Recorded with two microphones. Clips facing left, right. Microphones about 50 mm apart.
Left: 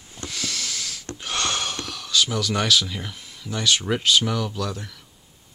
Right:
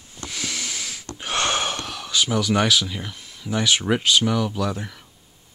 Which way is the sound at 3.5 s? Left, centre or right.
Centre.